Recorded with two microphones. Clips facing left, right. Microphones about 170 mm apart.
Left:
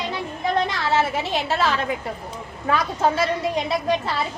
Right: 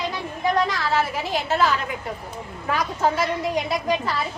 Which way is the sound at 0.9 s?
25° left (ahead or behind).